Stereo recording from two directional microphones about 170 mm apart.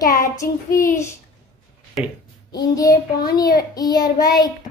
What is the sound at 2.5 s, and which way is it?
A child's voice, 20° left (ahead or behind).